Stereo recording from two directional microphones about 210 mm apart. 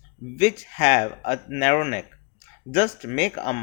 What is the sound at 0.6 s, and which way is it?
Speech, 35° left (ahead or behind).